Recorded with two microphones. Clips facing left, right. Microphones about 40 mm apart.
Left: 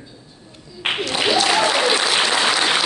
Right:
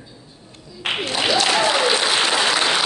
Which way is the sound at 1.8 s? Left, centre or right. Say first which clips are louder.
Left 1 dB; centre.